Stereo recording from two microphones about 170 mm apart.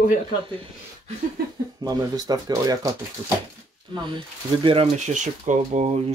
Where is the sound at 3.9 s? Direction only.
25° right (ahead or behind); by 5.8 s 45° right (ahead or behind).